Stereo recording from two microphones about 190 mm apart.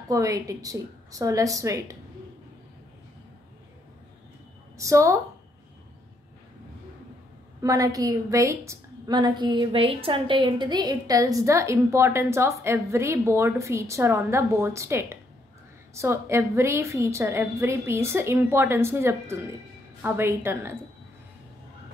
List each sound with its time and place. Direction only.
0.1 s a woman's voice: 15° right (ahead or behind)
4.7 s a woman's voice: 15° right (ahead or behind)
7.6 s a woman's voice: 20° right (ahead or behind)